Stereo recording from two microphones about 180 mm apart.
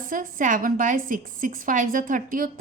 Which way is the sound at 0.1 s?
45° right (ahead or behind).